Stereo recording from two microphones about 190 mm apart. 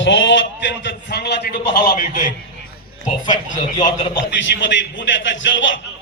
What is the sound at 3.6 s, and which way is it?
Speech, 25° left (ahead or behind).